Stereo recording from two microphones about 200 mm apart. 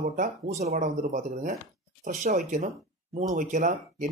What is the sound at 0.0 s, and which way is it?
Speech, 35° right (ahead or behind).